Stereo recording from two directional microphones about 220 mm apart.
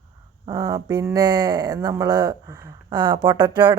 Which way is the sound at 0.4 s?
15° right (ahead or behind).